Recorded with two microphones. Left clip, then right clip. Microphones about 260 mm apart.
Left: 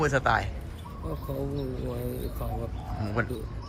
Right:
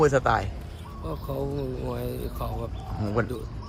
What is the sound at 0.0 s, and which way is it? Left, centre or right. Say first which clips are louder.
Speech: right 3 dB; centre.